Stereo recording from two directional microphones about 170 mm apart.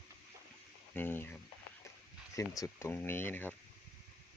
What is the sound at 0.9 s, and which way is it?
Speech, 10° left (ahead or behind).